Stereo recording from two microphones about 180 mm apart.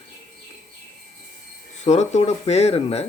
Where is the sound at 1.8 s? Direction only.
40° left (ahead or behind).